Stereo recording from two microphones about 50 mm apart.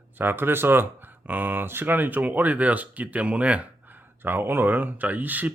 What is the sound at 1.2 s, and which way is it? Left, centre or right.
Speech, right.